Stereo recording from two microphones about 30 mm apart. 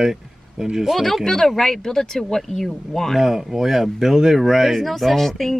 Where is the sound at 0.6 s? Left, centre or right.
Centre.